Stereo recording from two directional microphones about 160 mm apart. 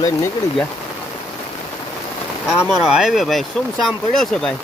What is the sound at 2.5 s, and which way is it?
Speech, 5° right (ahead or behind).